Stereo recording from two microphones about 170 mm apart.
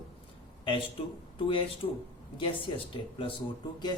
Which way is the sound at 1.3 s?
30° left (ahead or behind).